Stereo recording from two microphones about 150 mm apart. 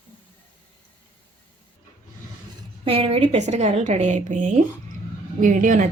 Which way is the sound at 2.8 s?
40° right (ahead or behind).